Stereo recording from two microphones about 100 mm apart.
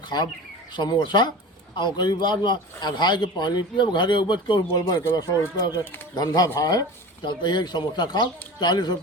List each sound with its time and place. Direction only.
0.8 s a man's voice: 45° left (ahead or behind)
4.8 s a man's voice: 40° left (ahead or behind)